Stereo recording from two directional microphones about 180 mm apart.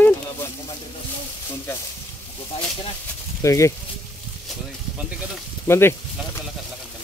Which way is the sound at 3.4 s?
15° left (ahead or behind).